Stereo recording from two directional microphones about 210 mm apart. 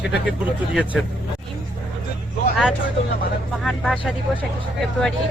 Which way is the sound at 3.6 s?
Centre (ahead or behind).